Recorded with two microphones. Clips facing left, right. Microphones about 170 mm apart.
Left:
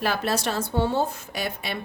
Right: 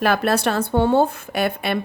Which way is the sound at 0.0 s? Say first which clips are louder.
Right 6 dB; 60° right (ahead or behind).